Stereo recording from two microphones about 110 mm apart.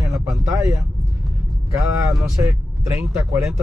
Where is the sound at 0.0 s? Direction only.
25° right (ahead or behind).